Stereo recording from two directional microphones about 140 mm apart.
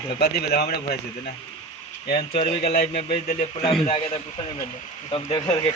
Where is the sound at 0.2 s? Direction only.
90° left.